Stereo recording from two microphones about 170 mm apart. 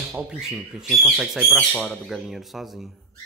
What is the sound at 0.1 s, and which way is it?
Speech, 5° right (ahead or behind).